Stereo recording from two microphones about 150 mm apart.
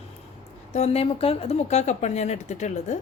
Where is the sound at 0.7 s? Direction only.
45° left (ahead or behind).